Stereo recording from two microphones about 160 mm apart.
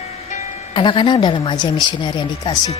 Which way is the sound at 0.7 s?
30° left (ahead or behind).